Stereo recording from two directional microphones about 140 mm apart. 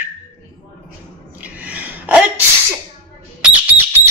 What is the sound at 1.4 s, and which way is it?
Sneeze, 10° right (ahead or behind).